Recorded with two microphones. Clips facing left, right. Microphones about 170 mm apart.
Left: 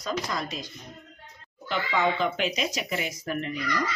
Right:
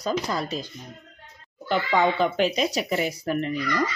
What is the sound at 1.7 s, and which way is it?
Speech, 40° right (ahead or behind).